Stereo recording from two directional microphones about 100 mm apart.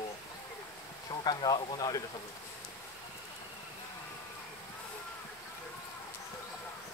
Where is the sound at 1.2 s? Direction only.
45° left (ahead or behind).